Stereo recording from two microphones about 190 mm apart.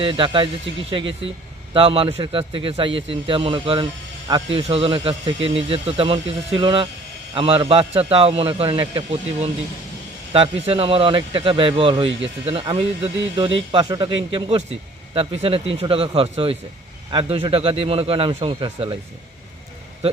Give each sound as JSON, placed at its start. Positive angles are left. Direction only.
{"t": 0.0, "sound": "speech", "side_deg": -25}